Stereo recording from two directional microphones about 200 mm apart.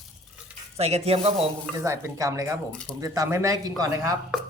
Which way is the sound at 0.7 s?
30° right (ahead or behind).